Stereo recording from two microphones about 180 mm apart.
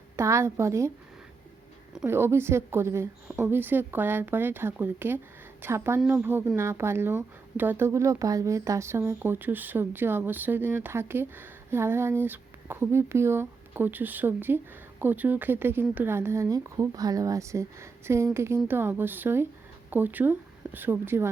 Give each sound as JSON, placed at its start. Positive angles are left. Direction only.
{"t": 0.2, "sound": "a woman's voice", "side_deg": -15}
{"t": 2.0, "sound": "a woman's voice", "side_deg": -15}